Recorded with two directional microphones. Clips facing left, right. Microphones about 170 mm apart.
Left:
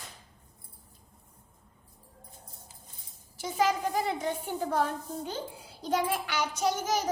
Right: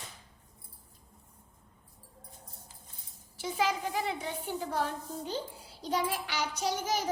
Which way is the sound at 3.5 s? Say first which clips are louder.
Left 4 dB; 45° left (ahead or behind).